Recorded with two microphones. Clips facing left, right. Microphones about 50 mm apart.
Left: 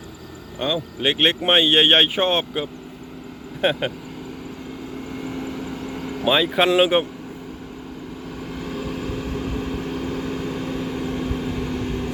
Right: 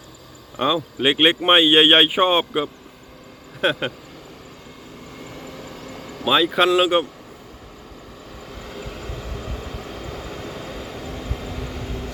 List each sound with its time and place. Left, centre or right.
0.6 s speech: centre
3.6 s speech: centre
5.2 s vehicle: left
6.2 s speech: centre
8.7 s vehicle: centre